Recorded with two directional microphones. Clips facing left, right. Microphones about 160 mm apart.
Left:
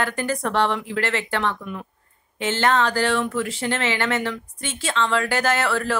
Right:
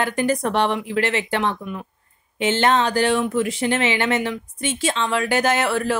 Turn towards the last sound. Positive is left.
turn(degrees=-15)  # may be behind; listen again after turning